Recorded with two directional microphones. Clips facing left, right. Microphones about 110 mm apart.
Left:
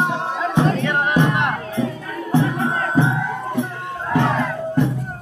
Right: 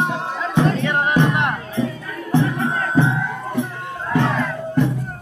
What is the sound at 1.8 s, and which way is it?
Music, 15° left (ahead or behind).